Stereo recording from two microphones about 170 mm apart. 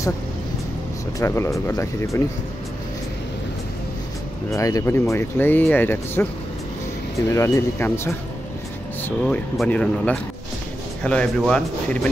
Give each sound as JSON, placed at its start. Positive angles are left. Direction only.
{"t": 1.2, "sound": "speech", "side_deg": 15}
{"t": 4.5, "sound": "speech", "side_deg": 20}
{"t": 7.2, "sound": "speech", "side_deg": 20}
{"t": 9.2, "sound": "speech", "side_deg": 5}